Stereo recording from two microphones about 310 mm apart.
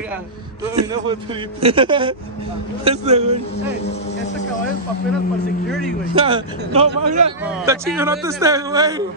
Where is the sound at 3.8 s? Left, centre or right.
Centre.